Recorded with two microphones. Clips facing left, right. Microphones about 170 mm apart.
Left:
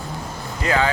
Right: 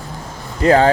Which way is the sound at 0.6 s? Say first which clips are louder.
Right 9 dB; 35° right (ahead or behind).